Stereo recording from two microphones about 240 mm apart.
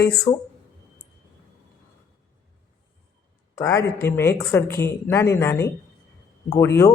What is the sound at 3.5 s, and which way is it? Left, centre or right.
Speech, centre.